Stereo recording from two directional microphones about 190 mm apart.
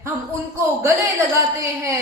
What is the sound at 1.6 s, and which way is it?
Speech, 15° right (ahead or behind).